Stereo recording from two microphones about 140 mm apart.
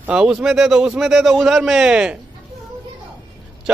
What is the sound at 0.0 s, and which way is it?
A man's voice, 5° right (ahead or behind).